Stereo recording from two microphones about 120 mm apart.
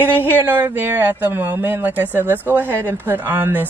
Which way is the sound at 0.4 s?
15° right (ahead or behind).